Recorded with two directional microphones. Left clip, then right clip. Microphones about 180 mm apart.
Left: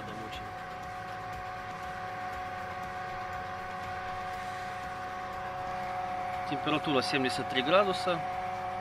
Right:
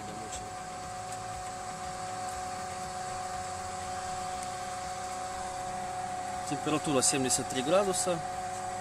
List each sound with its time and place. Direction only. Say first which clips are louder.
6.5 s speech: even; 55° right (ahead or behind)